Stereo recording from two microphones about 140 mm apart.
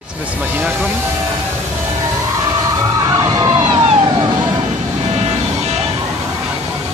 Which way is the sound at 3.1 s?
25° right (ahead or behind).